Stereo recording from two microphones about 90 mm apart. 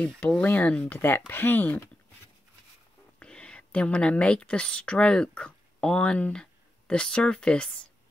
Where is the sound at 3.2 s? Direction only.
10° left (ahead or behind).